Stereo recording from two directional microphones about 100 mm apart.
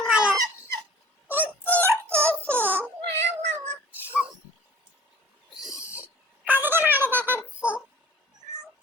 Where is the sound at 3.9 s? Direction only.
15° right (ahead or behind).